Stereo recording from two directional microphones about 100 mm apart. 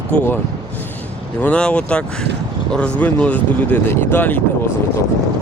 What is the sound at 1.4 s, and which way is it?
Speech, 15° left (ahead or behind).